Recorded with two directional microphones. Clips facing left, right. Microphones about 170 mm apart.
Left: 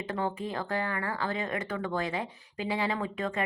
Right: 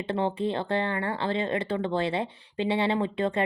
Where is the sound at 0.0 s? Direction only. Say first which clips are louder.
Right 5 dB; 30° right (ahead or behind).